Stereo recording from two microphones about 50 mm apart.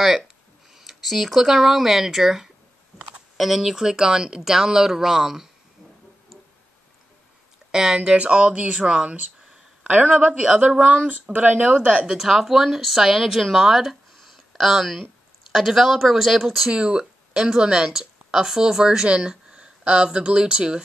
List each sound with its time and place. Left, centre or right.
0.7 s speech: centre
7.7 s speech: centre
8.2 s speech: right
10.4 s speech: centre
12.1 s speech: centre
16.7 s a woman's voice: centre